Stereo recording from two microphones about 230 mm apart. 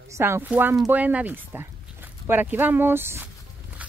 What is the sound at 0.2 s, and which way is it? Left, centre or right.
Speech, centre.